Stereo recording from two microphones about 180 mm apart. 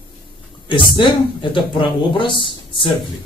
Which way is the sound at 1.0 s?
25° left (ahead or behind).